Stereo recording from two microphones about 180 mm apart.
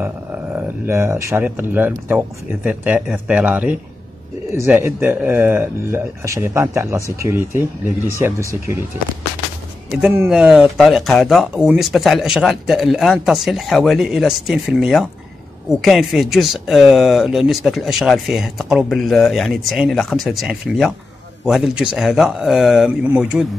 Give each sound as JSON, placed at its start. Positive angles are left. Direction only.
{"t": 0.0, "sound": "speech", "side_deg": -15}
{"t": 9.9, "sound": "speech", "side_deg": -10}